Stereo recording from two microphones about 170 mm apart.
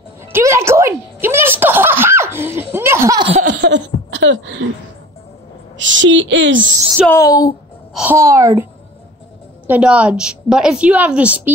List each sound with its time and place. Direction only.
0.3 s a sound: 15° right (ahead or behind)
2.7 s laughter: 15° right (ahead or behind)
3.2 s baby laughter: 35° right (ahead or behind)
3.6 s a sound: 90° right
5.8 s speech: 90° right
7.1 s a woman's voice: 20° left (ahead or behind)
7.9 s a child's voice: 10° right (ahead or behind)
9.7 s a woman's voice: 5° right (ahead or behind)